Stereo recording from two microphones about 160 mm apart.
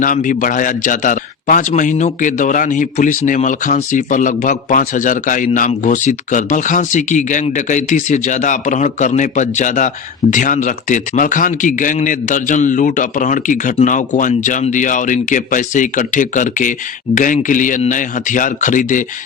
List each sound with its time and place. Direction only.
0.0 s a man's voice: 55° left (ahead or behind)